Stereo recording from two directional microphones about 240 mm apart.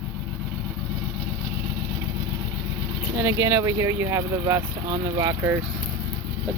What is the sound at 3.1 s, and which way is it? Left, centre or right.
Speech, centre.